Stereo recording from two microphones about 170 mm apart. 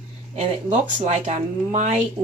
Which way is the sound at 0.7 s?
40° right (ahead or behind).